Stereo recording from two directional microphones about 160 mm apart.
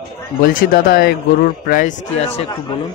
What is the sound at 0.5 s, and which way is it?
Speech, 70° left (ahead or behind).